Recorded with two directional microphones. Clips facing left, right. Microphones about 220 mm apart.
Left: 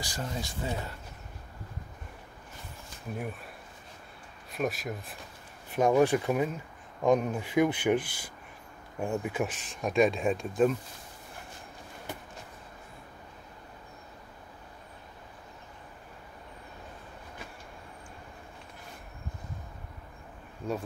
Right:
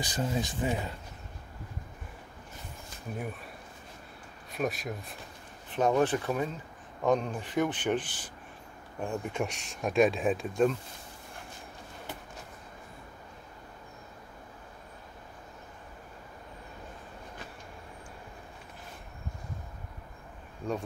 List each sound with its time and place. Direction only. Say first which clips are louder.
0.0 s speech: right 5 dB; 20° right (ahead or behind)
4.5 s speech: left 1 dB; centre (ahead or behind)